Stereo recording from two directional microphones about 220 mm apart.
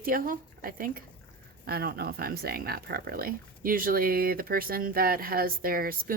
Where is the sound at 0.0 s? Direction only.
40° right (ahead or behind).